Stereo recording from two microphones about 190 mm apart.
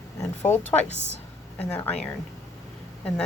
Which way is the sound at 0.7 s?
35° left (ahead or behind).